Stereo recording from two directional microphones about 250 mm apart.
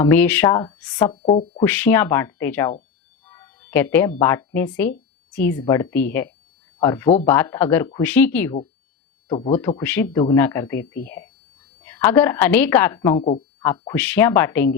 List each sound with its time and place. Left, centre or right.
0.0 s a woman's voice: centre
1.1 s speech: left
1.6 s a woman's voice: centre
3.2 s music: centre
4.2 s a woman's voice: centre
7.1 s speech: left
7.3 s a woman's voice: centre
9.3 s speech: left
9.6 s a woman's voice: centre
13.2 s a sound: left
13.7 s a woman's voice: centre